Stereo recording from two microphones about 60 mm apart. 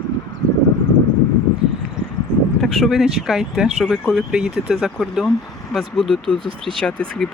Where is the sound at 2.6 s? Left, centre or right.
Centre.